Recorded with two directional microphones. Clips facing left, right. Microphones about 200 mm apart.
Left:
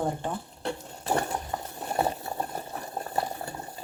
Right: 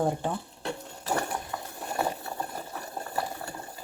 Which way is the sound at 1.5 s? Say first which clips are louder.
Left 3 dB; 35° left (ahead or behind).